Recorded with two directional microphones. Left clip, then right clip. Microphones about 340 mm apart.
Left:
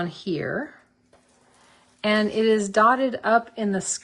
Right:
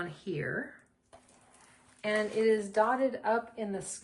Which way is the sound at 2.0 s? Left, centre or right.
Left.